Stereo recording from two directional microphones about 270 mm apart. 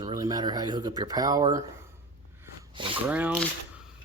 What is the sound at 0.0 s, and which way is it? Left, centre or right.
Speech, centre.